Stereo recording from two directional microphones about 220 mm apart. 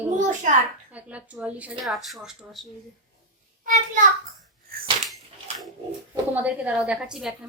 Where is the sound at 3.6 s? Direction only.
35° right (ahead or behind).